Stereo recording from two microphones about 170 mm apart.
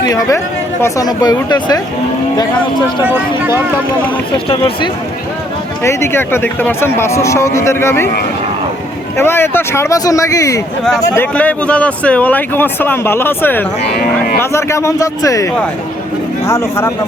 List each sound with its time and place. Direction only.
0.0 s speech: 20° left (ahead or behind)
3.0 s speech: 15° right (ahead or behind)
4.4 s speech: 30° left (ahead or behind)
5.8 s speech: 15° left (ahead or behind)
9.1 s speech: 15° left (ahead or behind)
13.9 s speech: 60° left (ahead or behind)
14.5 s speech: 15° left (ahead or behind)
16.5 s speech: 15° left (ahead or behind)